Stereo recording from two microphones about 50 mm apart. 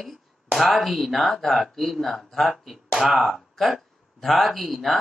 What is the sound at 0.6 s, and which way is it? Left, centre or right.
Speech, centre.